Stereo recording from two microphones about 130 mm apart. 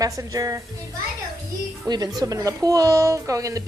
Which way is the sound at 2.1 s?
25° right (ahead or behind).